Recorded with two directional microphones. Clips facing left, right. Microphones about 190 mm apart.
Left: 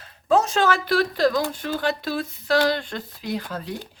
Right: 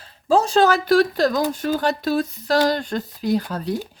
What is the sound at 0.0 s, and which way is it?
A woman's voice, 30° right (ahead or behind).